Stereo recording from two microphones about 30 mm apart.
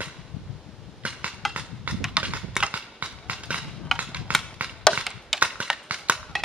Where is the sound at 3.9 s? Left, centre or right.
Centre.